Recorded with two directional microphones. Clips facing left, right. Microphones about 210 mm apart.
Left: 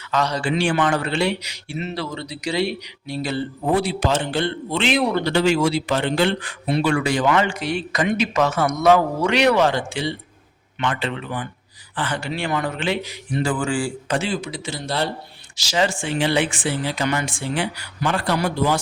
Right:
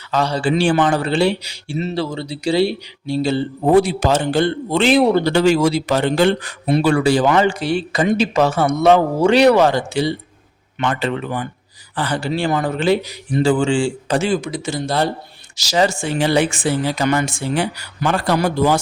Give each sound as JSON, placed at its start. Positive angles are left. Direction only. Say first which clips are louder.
{"t": 0.1, "sound": "a man's voice", "louder": "right 4 dB", "side_deg": -30}
{"t": 3.7, "sound": "a man's voice", "louder": "right 7 dB", "side_deg": -45}
{"t": 5.3, "sound": "a man's voice", "louder": "right 4 dB", "side_deg": -45}
{"t": 14.2, "sound": "a man's voice", "louder": "right 6 dB", "side_deg": -45}